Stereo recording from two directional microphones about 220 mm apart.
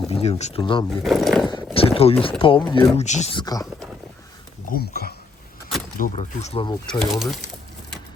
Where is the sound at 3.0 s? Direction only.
30° left (ahead or behind).